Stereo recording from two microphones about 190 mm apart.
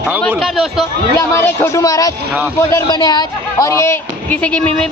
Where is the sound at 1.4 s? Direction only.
15° left (ahead or behind).